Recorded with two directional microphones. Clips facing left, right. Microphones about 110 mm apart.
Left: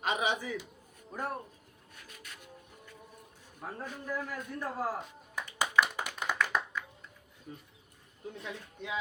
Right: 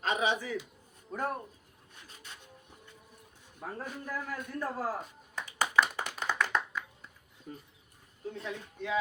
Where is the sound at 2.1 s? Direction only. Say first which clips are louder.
Even; 25° right (ahead or behind).